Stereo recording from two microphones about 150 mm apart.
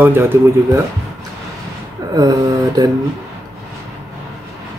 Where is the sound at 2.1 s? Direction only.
25° right (ahead or behind).